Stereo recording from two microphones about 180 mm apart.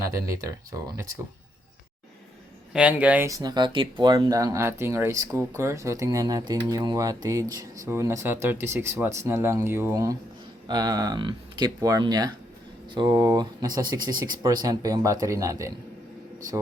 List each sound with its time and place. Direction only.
0.0 s speech: 15° right (ahead or behind)
2.7 s speech: 5° right (ahead or behind)